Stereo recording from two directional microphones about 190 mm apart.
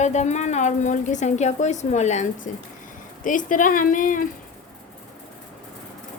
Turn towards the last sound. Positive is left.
turn(degrees=45)  # may be behind; listen again after turning